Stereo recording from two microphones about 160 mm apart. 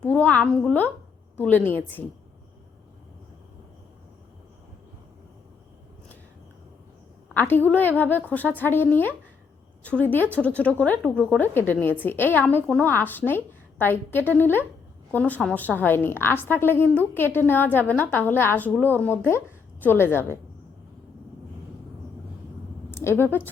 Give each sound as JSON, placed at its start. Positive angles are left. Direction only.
{"t": 0.1, "sound": "a sound", "side_deg": 10}
{"t": 0.6, "sound": "a woman's voice", "side_deg": 10}
{"t": 7.3, "sound": "a woman's voice", "side_deg": 10}
{"t": 22.9, "sound": "speech", "side_deg": 15}